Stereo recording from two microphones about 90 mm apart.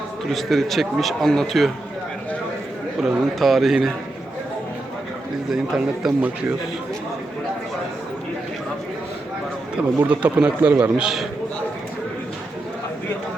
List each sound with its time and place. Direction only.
0.3 s a man's voice: centre (ahead or behind)
3.0 s a man's voice: centre (ahead or behind)
5.5 s a man's voice: 5° right (ahead or behind)
9.7 s speech: 15° right (ahead or behind)
10.9 s a man's voice: 5° right (ahead or behind)